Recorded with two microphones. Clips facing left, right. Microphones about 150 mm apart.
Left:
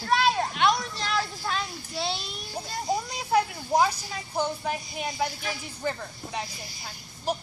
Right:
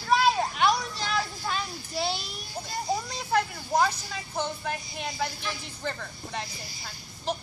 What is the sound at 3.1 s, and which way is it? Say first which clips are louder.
Speech: left 2 dB; 15° left (ahead or behind).